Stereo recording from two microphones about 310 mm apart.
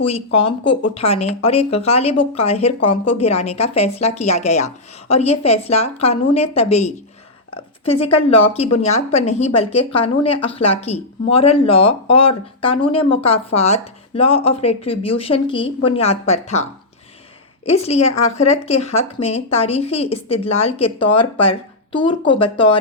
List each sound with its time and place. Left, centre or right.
0.0 s a woman's voice: centre
17.7 s a woman's voice: centre